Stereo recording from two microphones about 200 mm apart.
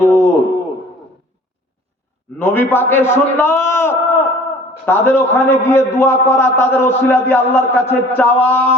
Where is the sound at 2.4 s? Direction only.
10° left (ahead or behind).